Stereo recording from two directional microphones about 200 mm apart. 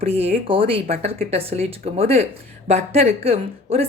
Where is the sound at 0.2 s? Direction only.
30° right (ahead or behind).